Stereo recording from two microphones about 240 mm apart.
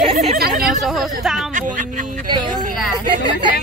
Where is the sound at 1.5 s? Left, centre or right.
Right.